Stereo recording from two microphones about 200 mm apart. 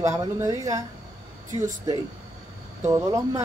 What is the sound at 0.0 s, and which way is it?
Speech, 15° right (ahead or behind).